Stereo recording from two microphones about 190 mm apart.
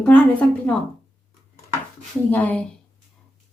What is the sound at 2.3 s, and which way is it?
Speech, 10° left (ahead or behind).